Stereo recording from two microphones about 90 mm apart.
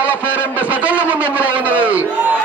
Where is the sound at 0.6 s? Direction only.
15° right (ahead or behind).